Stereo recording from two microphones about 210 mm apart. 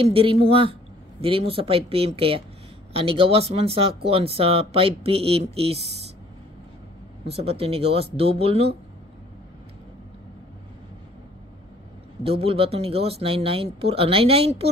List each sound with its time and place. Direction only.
0.0 s speech: 25° right (ahead or behind)
7.2 s speech: 30° right (ahead or behind)
12.2 s speech: 25° right (ahead or behind)